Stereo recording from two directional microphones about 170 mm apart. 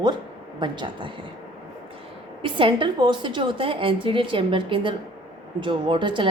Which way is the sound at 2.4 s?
30° right (ahead or behind).